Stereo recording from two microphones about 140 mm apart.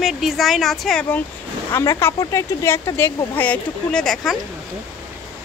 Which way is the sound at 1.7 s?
20° left (ahead or behind).